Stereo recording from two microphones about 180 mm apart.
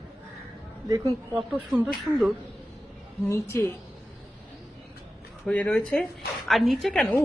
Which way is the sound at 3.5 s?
15° left (ahead or behind).